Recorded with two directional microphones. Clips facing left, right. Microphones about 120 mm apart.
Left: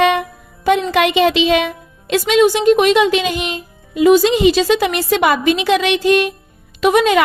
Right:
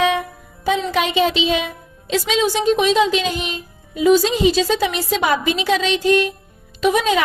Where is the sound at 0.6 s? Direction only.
70° left (ahead or behind).